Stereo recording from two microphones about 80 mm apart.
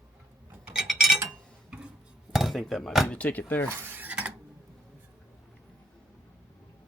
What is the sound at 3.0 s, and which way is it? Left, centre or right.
Speech, centre.